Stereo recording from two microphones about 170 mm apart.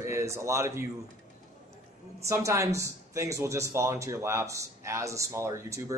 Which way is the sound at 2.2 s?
20° right (ahead or behind).